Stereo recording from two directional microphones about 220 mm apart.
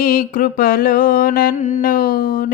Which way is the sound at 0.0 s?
40° left (ahead or behind).